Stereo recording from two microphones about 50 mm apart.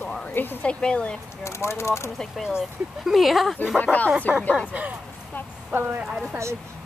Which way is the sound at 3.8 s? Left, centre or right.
Left.